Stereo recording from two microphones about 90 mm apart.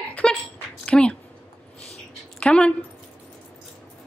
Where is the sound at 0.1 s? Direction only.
15° left (ahead or behind).